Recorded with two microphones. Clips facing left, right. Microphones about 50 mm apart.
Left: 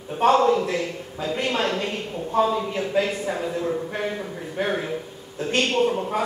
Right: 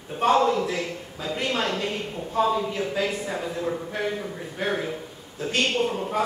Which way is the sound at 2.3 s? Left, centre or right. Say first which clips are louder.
Left 1 dB; centre.